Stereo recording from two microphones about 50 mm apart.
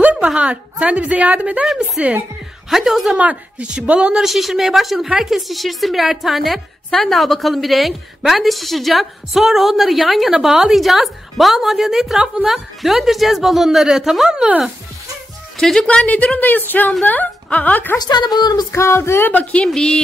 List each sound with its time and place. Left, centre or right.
0.0 s a sound: right
0.3 s a woman's voice: right
2.7 s a woman's voice: centre
3.2 s a woman's voice: right
4.2 s a woman's voice: centre
15.5 s speech: centre
15.9 s a woman's voice: left
16.3 s a woman's voice: left
18.7 s a sound: left
19.3 s a woman's voice: left
19.7 s speech: centre